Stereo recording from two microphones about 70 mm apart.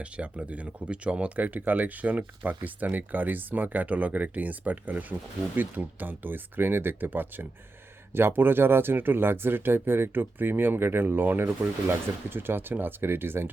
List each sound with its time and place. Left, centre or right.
0.0 s speech: centre; by 13.5 s right